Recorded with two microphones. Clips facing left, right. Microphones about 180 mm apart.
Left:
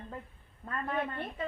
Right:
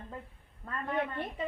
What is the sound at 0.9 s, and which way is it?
Speech, 15° right (ahead or behind).